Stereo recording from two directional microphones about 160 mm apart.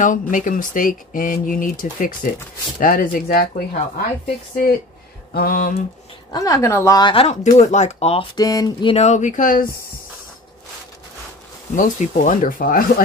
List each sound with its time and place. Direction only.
0.0 s speech: 55° left (ahead or behind)
5.3 s speech: 65° left (ahead or behind)
6.3 s a woman's voice: 20° left (ahead or behind)
7.5 s speech: 45° left (ahead or behind)
8.4 s a woman's voice: 25° left (ahead or behind)
8.9 s speech: 45° left (ahead or behind)
11.7 s speech: 50° left (ahead or behind)